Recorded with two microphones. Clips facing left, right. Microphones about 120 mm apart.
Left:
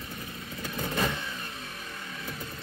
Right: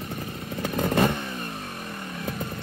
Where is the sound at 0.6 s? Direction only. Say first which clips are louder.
Right 8 dB; 60° right (ahead or behind).